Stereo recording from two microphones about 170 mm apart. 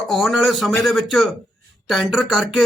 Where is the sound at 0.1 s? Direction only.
Centre (ahead or behind).